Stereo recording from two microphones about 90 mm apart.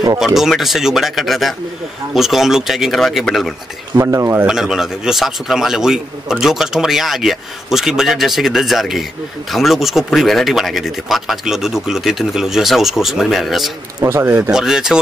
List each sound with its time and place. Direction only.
0.2 s speech: 5° right (ahead or behind)
3.9 s speech: 35° right (ahead or behind)
4.5 s speech: 5° right (ahead or behind)
14.0 s speech: 25° right (ahead or behind)
14.5 s speech: 5° right (ahead or behind)